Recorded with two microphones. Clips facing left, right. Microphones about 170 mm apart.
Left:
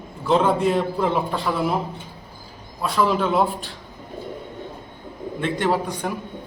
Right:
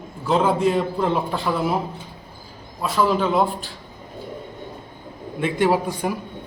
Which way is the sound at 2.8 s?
Centre (ahead or behind).